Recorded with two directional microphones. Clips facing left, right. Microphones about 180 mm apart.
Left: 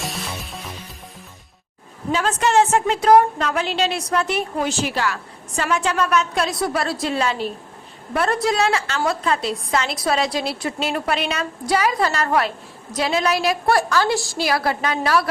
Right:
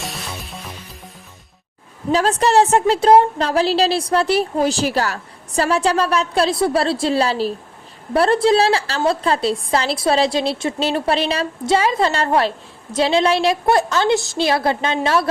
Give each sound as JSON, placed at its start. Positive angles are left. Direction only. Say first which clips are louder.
{"t": 0.0, "sound": "music", "louder": "left 1 dB", "side_deg": 0}
{"t": 2.1, "sound": "a woman's voice", "louder": "right 3 dB", "side_deg": -35}